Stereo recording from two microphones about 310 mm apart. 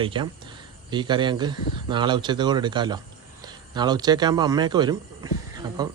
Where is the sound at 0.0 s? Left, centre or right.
Centre.